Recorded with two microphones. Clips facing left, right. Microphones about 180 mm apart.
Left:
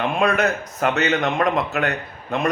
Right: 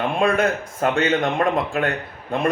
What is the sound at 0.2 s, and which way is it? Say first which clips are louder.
A man's voice: right 1 dB; 30° right (ahead or behind).